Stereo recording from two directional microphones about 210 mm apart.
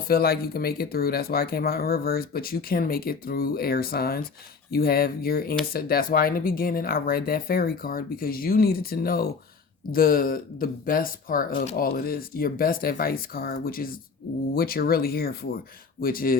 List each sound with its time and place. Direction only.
0.1 s speech: 45° left (ahead or behind)